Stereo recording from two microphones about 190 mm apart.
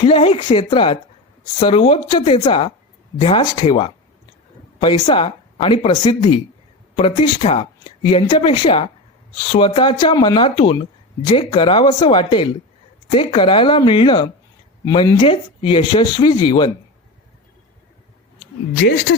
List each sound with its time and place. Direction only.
0.0 s speech: 30° left (ahead or behind)